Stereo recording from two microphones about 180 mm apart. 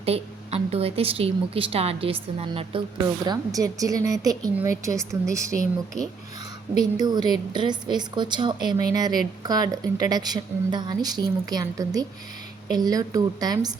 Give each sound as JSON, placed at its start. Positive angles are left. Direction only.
{"t": 0.0, "sound": "a woman's voice", "side_deg": -35}
{"t": 3.2, "sound": "a woman's voice", "side_deg": -20}
{"t": 6.9, "sound": "a woman's voice", "side_deg": -25}